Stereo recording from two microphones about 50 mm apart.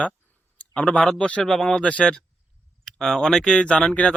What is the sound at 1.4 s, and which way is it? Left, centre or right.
Speech, centre.